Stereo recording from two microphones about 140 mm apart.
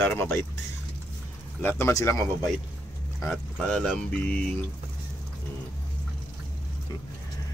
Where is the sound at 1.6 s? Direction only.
20° left (ahead or behind).